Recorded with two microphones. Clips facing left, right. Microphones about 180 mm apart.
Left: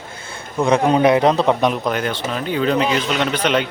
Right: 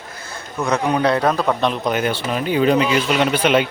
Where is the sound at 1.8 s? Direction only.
10° right (ahead or behind).